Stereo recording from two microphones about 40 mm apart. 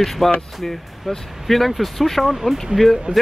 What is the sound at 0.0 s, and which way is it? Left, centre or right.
Speech, centre.